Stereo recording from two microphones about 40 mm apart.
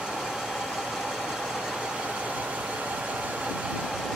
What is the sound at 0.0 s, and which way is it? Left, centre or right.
Vehicle, centre.